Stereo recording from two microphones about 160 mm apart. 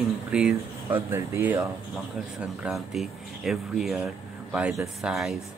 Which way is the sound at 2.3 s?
5° right (ahead or behind).